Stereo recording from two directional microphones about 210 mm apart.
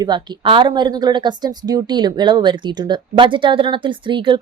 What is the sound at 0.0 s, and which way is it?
Speech, 20° right (ahead or behind).